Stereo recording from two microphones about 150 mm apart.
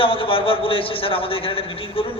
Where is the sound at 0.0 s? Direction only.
35° left (ahead or behind).